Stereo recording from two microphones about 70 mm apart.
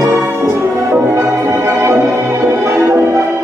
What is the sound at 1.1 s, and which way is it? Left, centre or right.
Music, right.